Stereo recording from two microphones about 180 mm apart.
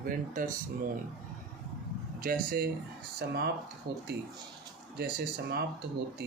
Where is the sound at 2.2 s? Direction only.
55° right (ahead or behind).